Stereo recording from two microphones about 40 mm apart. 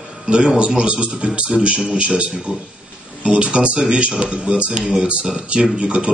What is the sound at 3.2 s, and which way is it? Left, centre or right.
A man's voice, right.